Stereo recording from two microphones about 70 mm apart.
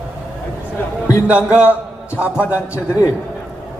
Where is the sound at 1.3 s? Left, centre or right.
Centre.